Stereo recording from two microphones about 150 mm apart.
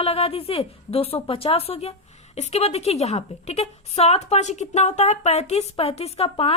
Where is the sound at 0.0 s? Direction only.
40° left (ahead or behind).